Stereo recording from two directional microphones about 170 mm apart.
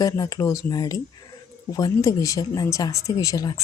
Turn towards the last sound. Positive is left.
turn(degrees=20)  # may be behind; listen again after turning